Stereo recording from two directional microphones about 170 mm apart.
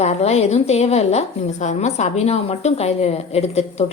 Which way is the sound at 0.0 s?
40° left (ahead or behind).